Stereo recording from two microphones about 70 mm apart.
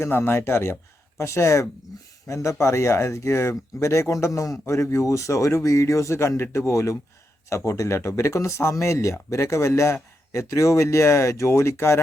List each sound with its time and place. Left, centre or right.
0.0 s speech: left